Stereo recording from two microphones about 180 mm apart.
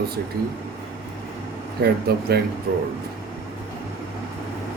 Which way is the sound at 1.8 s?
60° right (ahead or behind).